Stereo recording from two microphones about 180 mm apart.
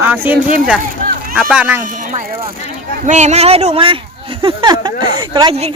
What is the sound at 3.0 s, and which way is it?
A man's voice, 40° right (ahead or behind).